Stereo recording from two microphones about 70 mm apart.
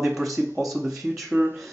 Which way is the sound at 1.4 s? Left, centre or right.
Right.